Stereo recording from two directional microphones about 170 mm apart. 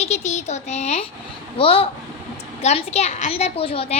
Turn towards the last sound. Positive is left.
turn(degrees=35)  # may be behind; listen again after turning